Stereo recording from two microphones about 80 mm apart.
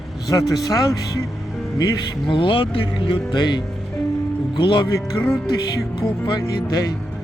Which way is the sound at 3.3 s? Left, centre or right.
Left.